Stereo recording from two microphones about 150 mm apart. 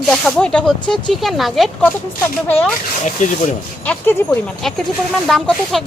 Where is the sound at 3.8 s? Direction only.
5° left (ahead or behind).